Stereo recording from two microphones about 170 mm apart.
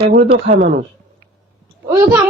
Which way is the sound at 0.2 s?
60° right (ahead or behind).